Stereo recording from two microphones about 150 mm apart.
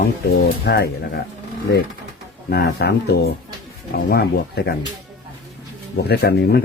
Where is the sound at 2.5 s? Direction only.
90° left.